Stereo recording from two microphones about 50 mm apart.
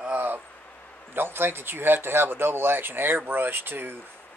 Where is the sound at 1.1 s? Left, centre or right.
Right.